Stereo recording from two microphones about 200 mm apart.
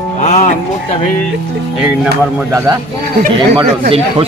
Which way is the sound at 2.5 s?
15° right (ahead or behind).